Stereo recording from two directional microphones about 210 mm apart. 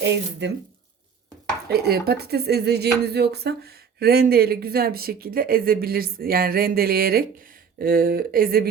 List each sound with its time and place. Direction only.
0.0 s speech: 55° right (ahead or behind)
1.6 s speech: 50° right (ahead or behind)